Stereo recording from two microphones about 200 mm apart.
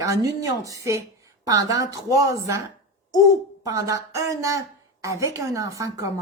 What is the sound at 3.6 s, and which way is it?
A woman's voice, 15° right (ahead or behind).